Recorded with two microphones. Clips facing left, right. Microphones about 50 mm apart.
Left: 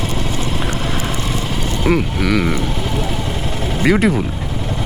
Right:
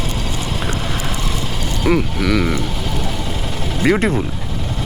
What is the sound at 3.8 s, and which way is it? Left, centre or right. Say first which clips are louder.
Speech: left 1 dB; centre.